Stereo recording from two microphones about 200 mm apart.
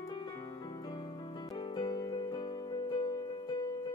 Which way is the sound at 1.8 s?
20° left (ahead or behind).